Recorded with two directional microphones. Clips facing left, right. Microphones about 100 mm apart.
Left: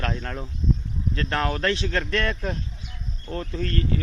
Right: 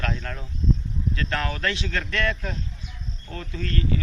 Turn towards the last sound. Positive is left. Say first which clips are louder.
# left 2 dB
turn(degrees=40)  # may be behind; listen again after turning